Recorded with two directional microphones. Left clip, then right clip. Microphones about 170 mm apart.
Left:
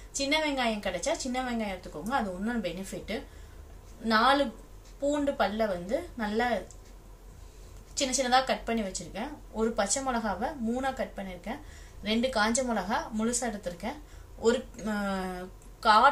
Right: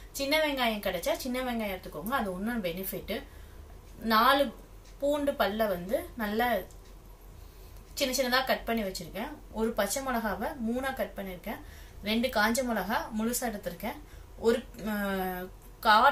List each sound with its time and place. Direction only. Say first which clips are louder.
0.1 s a woman's voice: even; 20° left (ahead or behind)
7.9 s a woman's voice: left 2 dB; 15° left (ahead or behind)